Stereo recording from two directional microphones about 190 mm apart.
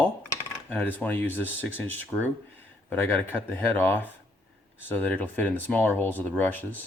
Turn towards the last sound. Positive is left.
turn(degrees=10)  # may be behind; listen again after turning